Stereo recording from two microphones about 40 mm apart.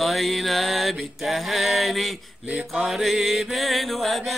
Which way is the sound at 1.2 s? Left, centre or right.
Centre.